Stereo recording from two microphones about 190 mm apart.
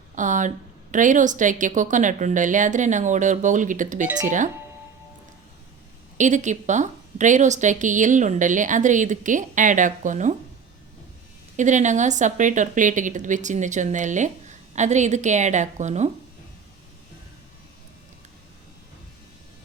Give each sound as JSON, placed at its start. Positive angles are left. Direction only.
{"t": 0.2, "sound": "speech", "side_deg": -40}
{"t": 6.1, "sound": "speech", "side_deg": -40}
{"t": 11.5, "sound": "speech", "side_deg": -40}